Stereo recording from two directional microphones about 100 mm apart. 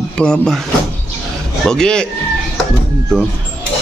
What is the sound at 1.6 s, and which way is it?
Speech, 5° left (ahead or behind).